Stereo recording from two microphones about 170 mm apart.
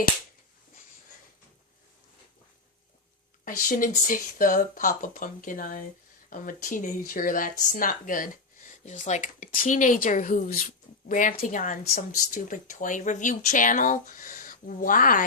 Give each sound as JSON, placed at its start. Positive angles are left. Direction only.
{"t": 3.4, "sound": "speech", "side_deg": 50}